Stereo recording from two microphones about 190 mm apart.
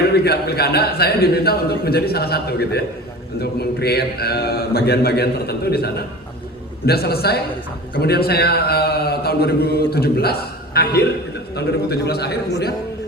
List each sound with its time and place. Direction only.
0.1 s a man's voice: 60° left (ahead or behind)